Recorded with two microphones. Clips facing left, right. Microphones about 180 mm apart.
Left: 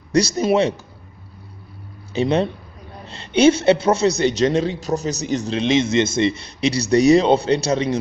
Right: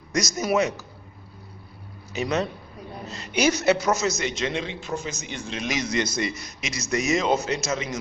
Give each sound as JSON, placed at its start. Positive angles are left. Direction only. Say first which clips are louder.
{"t": 0.1, "sound": "a man's voice", "louder": "left 7 dB", "side_deg": 30}
{"t": 2.1, "sound": "a man's voice", "louder": "left 7 dB", "side_deg": 30}
{"t": 5.6, "sound": "a man's voice", "louder": "left 8 dB", "side_deg": 25}